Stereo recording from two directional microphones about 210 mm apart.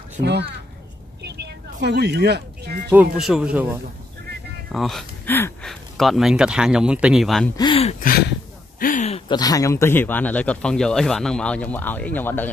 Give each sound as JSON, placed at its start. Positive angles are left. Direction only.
{"t": 0.2, "sound": "a child's voice", "side_deg": -55}
{"t": 1.2, "sound": "a sound", "side_deg": -55}
{"t": 2.9, "sound": "speech", "side_deg": -5}
{"t": 7.5, "sound": "speech", "side_deg": 25}
{"t": 8.0, "sound": "speech", "side_deg": 45}
{"t": 8.7, "sound": "a sound", "side_deg": 40}
{"t": 9.3, "sound": "a man's voice", "side_deg": 20}